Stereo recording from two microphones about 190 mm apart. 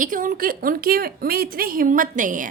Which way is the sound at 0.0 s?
45° right (ahead or behind).